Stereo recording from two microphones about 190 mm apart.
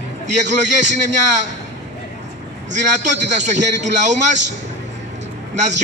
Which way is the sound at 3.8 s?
40° right (ahead or behind).